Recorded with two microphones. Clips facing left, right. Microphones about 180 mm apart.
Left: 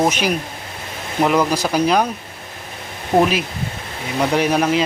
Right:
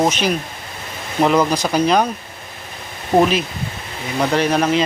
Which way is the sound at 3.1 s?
5° left (ahead or behind).